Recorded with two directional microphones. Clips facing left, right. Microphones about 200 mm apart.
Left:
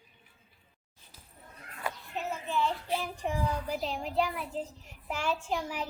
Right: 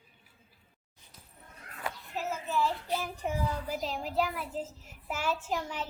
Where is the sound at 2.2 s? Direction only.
Centre (ahead or behind).